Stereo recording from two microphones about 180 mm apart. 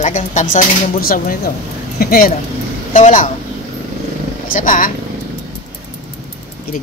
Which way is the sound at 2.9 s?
45° left (ahead or behind).